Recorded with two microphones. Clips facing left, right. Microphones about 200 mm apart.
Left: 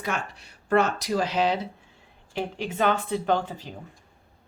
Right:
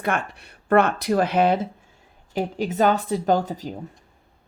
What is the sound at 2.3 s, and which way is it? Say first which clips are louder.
Speech: right 5 dB; 40° right (ahead or behind).